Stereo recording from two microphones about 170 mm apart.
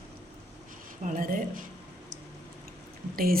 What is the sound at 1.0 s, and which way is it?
Speech, 55° right (ahead or behind).